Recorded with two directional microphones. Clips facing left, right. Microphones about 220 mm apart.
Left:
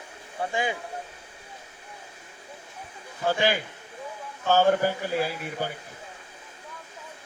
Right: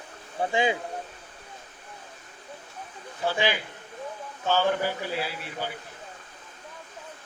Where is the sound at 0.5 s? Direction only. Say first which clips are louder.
Right 4 dB; 20° right (ahead or behind).